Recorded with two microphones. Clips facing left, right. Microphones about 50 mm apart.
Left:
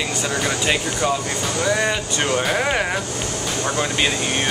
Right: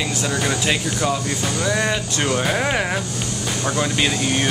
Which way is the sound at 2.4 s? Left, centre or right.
Centre.